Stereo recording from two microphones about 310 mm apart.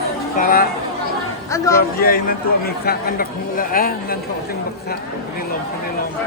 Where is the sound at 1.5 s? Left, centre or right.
Centre.